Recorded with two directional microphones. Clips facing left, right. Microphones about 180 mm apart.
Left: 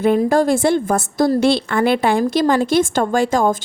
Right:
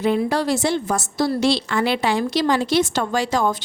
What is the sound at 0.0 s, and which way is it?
A woman's voice, 50° left (ahead or behind).